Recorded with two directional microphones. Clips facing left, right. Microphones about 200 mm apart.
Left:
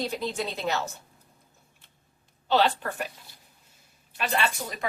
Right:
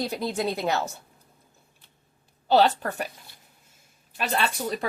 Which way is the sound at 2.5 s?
40° right (ahead or behind).